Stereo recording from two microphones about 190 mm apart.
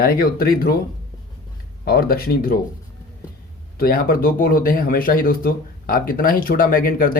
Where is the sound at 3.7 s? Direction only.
50° left (ahead or behind).